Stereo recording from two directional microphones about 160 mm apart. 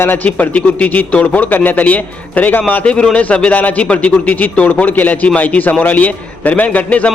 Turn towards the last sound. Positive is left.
turn(degrees=10)  # may be behind; listen again after turning